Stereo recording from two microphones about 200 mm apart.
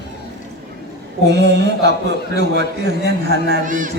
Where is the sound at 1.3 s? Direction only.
60° right (ahead or behind).